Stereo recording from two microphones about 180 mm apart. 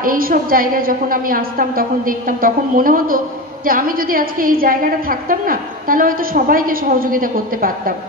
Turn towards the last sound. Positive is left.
turn(degrees=-50)  # may be behind; listen again after turning